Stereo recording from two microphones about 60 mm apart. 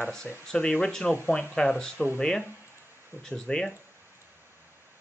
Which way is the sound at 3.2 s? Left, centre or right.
Centre.